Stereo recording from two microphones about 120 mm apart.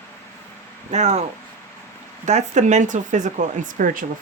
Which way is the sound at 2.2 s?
80° right.